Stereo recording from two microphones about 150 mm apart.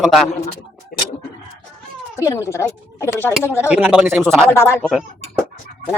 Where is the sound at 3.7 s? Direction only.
5° right (ahead or behind).